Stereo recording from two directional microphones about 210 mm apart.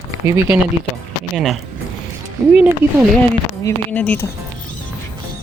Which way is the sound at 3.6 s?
5° left (ahead or behind).